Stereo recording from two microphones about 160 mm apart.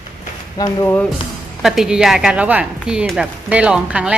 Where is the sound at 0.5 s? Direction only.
25° left (ahead or behind).